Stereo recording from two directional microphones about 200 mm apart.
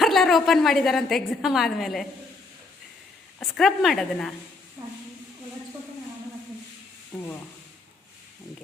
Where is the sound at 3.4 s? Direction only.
Centre (ahead or behind).